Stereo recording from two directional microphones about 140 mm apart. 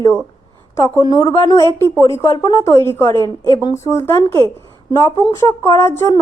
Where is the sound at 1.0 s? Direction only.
30° left (ahead or behind).